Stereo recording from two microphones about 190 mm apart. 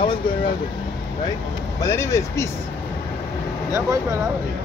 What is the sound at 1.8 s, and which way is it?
Speech, 15° left (ahead or behind).